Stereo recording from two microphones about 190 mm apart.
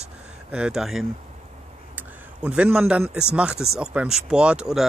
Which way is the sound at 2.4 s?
5° right (ahead or behind).